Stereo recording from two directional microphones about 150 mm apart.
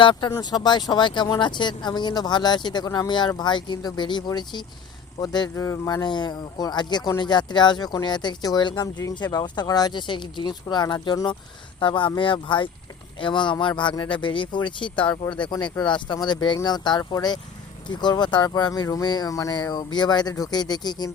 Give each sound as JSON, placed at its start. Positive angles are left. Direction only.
{"t": 0.0, "sound": "speech", "side_deg": 30}